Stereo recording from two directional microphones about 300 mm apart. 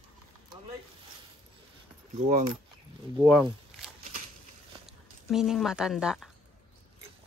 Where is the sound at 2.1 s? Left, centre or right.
Right.